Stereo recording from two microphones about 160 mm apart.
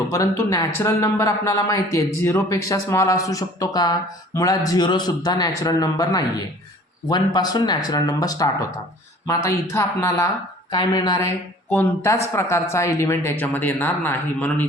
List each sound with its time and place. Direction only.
0.1 s a man's voice: 20° left (ahead or behind)
11.7 s speech: 15° left (ahead or behind)